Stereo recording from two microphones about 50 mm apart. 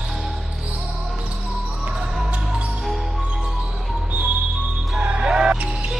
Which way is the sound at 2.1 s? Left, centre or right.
Centre.